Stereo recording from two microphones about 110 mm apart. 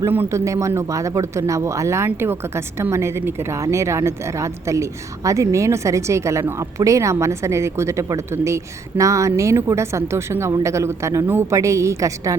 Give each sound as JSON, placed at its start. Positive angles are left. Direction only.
{"t": 0.0, "sound": "speech", "side_deg": -20}